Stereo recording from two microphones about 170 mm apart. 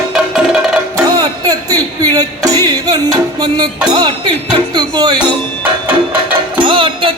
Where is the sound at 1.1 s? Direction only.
20° right (ahead or behind).